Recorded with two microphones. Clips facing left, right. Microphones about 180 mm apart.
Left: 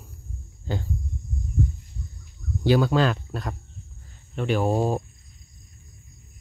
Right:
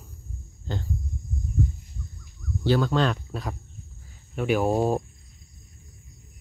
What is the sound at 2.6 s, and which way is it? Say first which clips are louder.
Speech: left 2 dB; 10° left (ahead or behind).